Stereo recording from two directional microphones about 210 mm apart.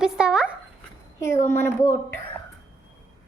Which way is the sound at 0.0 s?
5° right (ahead or behind).